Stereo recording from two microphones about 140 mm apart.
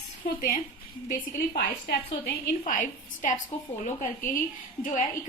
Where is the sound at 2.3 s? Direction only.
70° left (ahead or behind).